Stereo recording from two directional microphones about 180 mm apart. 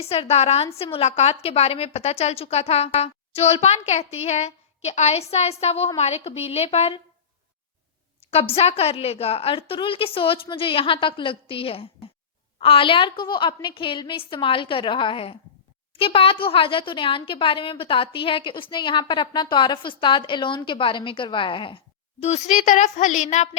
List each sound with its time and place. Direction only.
0.0 s a woman's voice: 35° left (ahead or behind)
8.3 s a woman's voice: 35° left (ahead or behind)
22.2 s a woman's voice: 40° left (ahead or behind)